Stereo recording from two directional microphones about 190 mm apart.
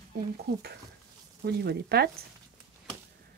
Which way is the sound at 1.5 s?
55° right (ahead or behind).